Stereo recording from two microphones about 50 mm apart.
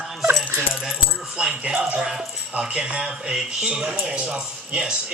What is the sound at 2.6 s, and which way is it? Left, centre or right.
Speech, centre.